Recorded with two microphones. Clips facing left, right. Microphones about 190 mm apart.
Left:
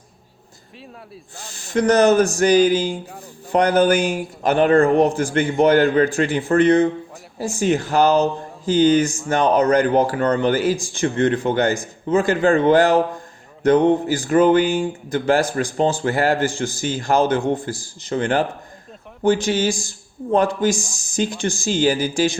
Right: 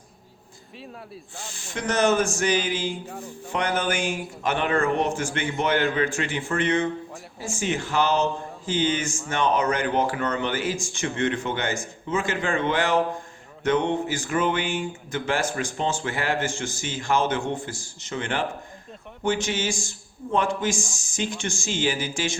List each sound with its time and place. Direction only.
1.5 s speech: 40° left (ahead or behind)